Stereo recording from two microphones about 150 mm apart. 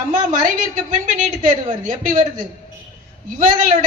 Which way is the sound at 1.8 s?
60° right (ahead or behind).